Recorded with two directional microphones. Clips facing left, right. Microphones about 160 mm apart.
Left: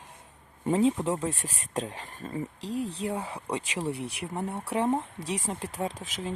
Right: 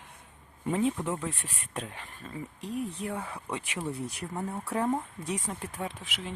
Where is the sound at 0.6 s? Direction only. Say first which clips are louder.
Left 4 dB; 25° left (ahead or behind).